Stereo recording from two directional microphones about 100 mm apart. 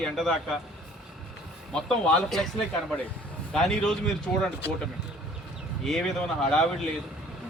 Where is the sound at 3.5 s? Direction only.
5° left (ahead or behind).